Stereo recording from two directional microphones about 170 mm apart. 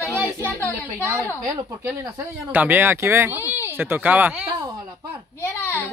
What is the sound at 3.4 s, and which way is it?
Speech, 15° left (ahead or behind).